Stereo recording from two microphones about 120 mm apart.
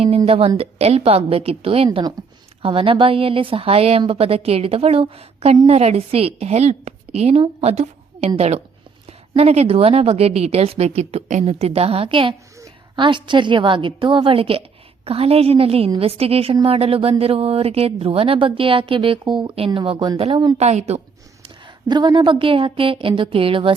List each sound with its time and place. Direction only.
0.3 s speech: 50° right (ahead or behind)
7.6 s a sound: 60° right (ahead or behind)
8.4 s a woman's voice: 60° right (ahead or behind); by 20.6 s 35° right (ahead or behind)
20.6 s a woman's voice: 65° right (ahead or behind)
21.4 s speech: 40° right (ahead or behind)